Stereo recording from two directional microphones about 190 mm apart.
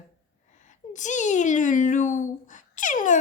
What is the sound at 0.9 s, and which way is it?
Speech, 40° left (ahead or behind).